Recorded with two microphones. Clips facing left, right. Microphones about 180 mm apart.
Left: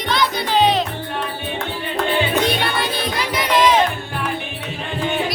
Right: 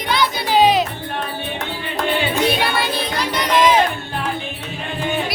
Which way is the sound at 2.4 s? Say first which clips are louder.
Right 1 dB; 5° right (ahead or behind).